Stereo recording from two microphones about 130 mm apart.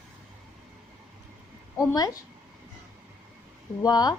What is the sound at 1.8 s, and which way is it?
Speech, 30° left (ahead or behind).